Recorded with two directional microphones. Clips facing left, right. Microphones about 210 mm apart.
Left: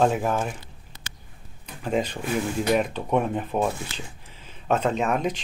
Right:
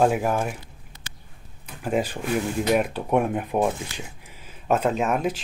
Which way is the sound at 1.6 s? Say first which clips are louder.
Right 1 dB; 10° right (ahead or behind).